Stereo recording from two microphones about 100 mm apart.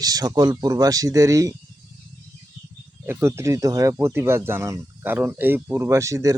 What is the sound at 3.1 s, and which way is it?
Speech, 25° right (ahead or behind).